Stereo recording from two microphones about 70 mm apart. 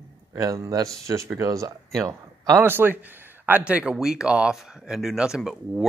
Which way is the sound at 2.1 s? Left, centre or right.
Right.